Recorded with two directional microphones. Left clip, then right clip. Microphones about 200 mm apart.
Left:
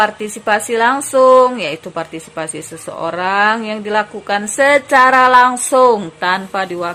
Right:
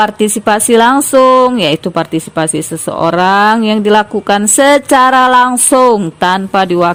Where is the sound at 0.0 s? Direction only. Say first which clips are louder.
Right 5 dB; 45° right (ahead or behind).